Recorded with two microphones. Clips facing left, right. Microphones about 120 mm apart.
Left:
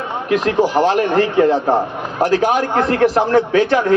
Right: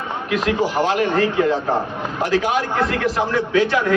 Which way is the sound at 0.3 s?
45° left (ahead or behind).